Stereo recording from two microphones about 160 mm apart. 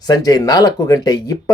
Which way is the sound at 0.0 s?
25° left (ahead or behind).